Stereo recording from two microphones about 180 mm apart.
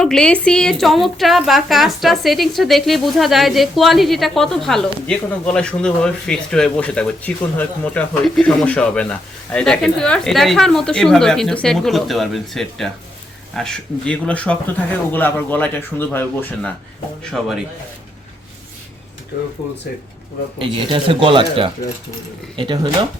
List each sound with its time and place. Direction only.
0.0 s a woman's voice: 5° left (ahead or behind)
20.6 s speech: 30° right (ahead or behind)